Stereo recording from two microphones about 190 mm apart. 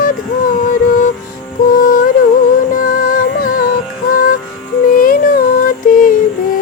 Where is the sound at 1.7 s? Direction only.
45° left (ahead or behind).